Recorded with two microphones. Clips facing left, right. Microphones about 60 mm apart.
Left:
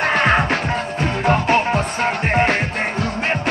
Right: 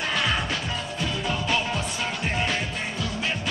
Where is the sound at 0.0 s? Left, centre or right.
Left.